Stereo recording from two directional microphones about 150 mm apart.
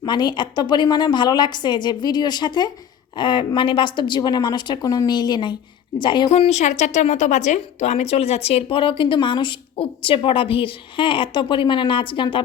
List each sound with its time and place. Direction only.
0.0 s a woman's voice: 30° left (ahead or behind)
6.2 s a woman's voice: 45° left (ahead or behind)